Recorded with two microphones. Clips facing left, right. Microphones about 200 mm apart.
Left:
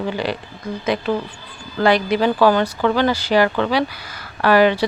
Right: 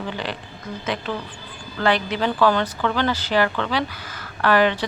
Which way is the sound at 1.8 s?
10° left (ahead or behind).